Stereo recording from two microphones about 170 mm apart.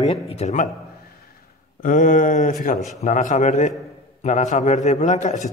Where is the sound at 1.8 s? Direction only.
50° left (ahead or behind).